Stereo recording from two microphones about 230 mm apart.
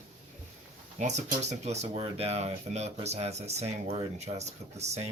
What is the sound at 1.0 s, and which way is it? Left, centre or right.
Speech, right.